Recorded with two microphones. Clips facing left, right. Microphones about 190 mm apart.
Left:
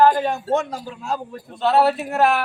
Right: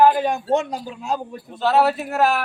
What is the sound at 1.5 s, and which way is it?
Speech, centre (ahead or behind).